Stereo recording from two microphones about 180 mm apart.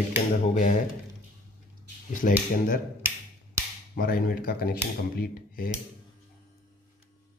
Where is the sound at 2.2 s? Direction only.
50° left (ahead or behind).